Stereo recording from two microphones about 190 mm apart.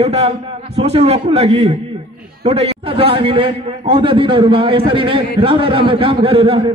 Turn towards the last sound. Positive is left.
turn(degrees=-30)  # may be behind; listen again after turning